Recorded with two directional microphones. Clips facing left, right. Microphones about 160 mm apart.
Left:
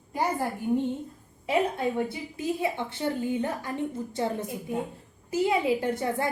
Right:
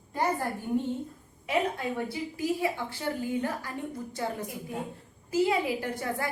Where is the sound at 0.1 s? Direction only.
15° left (ahead or behind).